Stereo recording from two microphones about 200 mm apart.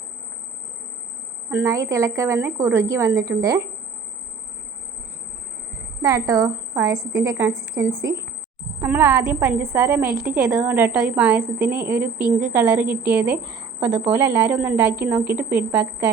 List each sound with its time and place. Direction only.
1.5 s a woman's voice: 10° right (ahead or behind)
6.0 s a woman's voice: 15° right (ahead or behind)
13.4 s a woman's voice: 15° left (ahead or behind)
13.7 s a woman's voice: 10° right (ahead or behind)